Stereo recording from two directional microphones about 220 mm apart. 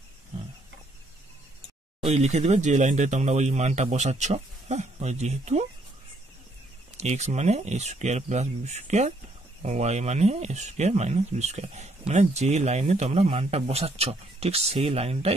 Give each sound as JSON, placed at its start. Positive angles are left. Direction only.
{"t": 2.0, "sound": "speech", "side_deg": -30}
{"t": 7.0, "sound": "a man's voice", "side_deg": -30}